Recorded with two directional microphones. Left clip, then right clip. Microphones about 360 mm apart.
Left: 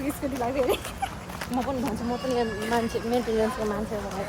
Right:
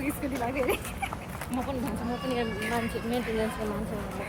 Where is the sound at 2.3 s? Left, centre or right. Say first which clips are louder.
Left 4 dB; centre.